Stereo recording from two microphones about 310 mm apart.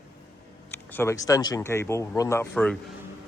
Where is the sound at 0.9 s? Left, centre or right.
Centre.